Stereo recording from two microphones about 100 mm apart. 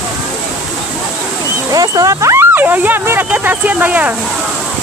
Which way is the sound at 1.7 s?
35° right (ahead or behind).